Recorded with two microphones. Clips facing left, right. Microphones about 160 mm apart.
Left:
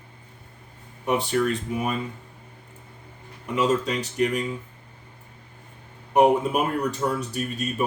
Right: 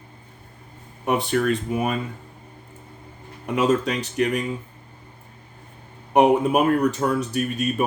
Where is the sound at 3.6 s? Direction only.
70° right (ahead or behind).